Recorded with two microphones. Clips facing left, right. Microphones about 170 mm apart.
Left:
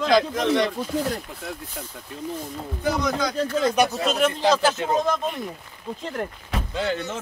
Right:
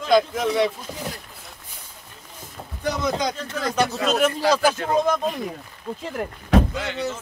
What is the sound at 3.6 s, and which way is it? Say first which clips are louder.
A man's voice: right 1 dB; 15° left (ahead or behind).